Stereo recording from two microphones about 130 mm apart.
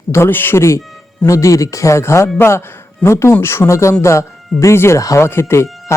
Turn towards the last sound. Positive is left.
turn(degrees=20)  # may be behind; listen again after turning